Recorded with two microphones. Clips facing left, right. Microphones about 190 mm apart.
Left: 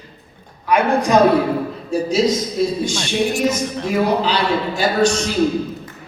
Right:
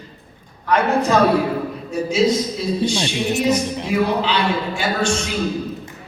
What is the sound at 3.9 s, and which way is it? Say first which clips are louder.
A man's voice: left 1 dB; 40° left (ahead or behind).